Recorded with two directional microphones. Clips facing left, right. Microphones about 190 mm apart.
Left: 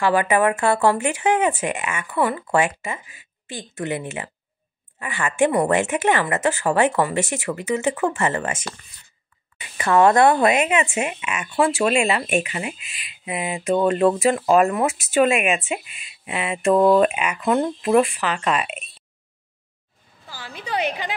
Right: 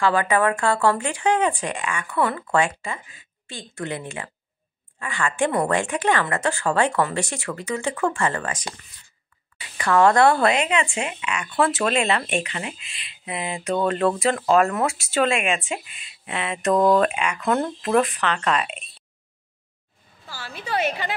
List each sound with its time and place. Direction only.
0.0 s speech: 15° left (ahead or behind)
20.2 s speech: 15° left (ahead or behind)